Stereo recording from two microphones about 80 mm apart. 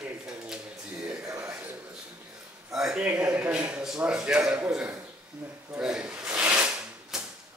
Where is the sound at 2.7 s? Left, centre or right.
Centre.